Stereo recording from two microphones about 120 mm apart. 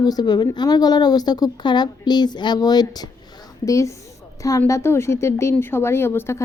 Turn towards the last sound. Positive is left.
turn(degrees=20)  # may be behind; listen again after turning